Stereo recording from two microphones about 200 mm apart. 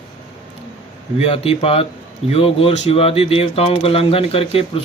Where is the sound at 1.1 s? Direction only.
30° left (ahead or behind).